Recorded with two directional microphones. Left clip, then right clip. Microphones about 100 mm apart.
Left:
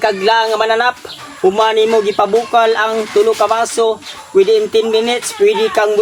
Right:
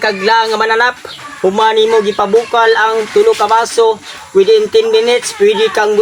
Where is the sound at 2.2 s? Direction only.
50° left (ahead or behind).